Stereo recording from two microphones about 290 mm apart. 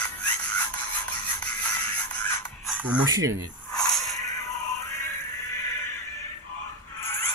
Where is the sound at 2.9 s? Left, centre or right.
Centre.